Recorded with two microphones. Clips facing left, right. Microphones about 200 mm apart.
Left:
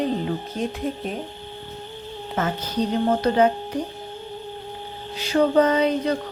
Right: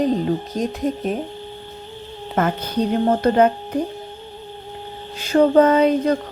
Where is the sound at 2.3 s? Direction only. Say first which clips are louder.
Right 5 dB; 55° right (ahead or behind).